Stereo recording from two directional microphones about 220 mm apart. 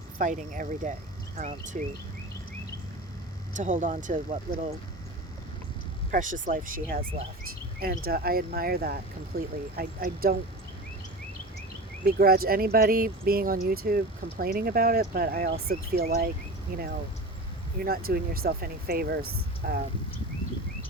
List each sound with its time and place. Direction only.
0.2 s speech: 35° right (ahead or behind)
3.5 s speech: 35° right (ahead or behind)
6.1 s speech: 35° right (ahead or behind)
12.0 s speech: 45° right (ahead or behind)